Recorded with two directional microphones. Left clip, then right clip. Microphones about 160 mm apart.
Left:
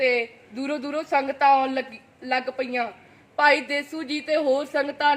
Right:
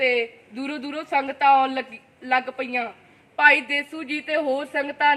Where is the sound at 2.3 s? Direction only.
10° right (ahead or behind).